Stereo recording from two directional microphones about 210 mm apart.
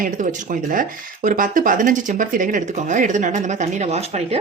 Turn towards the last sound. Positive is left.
turn(degrees=-30)  # may be behind; listen again after turning